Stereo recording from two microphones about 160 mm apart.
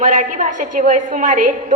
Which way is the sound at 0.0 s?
55° right (ahead or behind).